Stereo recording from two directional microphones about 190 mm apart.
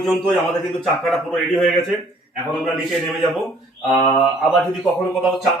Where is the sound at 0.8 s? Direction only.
Centre (ahead or behind).